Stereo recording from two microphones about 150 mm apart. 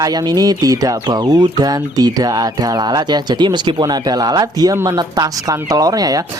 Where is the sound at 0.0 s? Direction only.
25° right (ahead or behind).